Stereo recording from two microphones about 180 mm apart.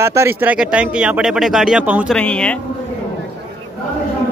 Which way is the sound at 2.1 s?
5° left (ahead or behind).